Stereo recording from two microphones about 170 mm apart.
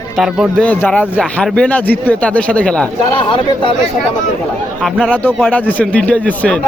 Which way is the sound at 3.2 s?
30° left (ahead or behind).